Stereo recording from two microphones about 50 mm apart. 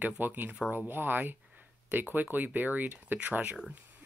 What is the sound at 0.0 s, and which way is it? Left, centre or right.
Speech, right.